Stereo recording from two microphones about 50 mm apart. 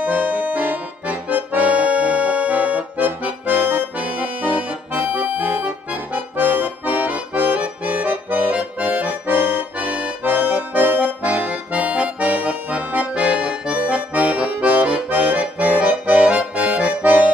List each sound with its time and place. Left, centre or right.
0.0 s accordion: right
3.9 s accordion: right
10.2 s accordion: right